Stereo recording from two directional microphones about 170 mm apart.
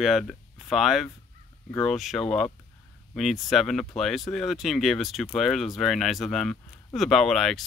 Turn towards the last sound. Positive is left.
turn(degrees=0)  # may be behind; listen again after turning